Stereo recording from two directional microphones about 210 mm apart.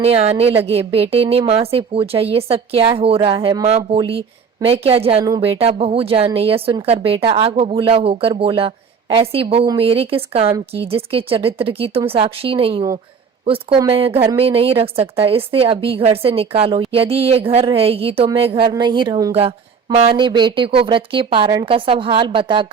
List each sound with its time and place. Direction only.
0.0 s speech: 30° right (ahead or behind)